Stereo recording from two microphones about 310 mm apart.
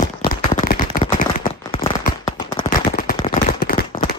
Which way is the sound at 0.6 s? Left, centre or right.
Left.